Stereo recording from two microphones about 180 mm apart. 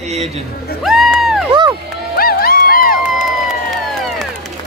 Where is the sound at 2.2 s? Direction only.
55° left (ahead or behind).